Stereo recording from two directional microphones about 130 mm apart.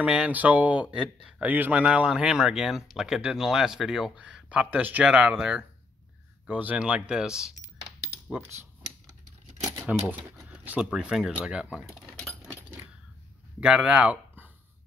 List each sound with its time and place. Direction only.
0.0 s speech: 10° right (ahead or behind)
8.5 s a sound: 25° right (ahead or behind)
9.6 s typewriter: 25° right (ahead or behind)
10.0 s speech: 10° right (ahead or behind)
13.6 s speech: 10° right (ahead or behind)